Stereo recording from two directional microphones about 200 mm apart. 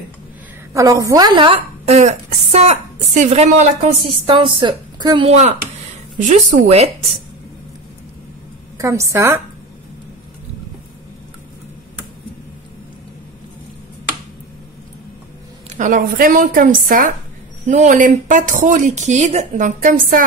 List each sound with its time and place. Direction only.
0.7 s a woman's voice: 15° right (ahead or behind); by 6.9 s 35° right (ahead or behind)
8.7 s a woman's voice: 15° right (ahead or behind)
15.7 s speech: 40° right (ahead or behind)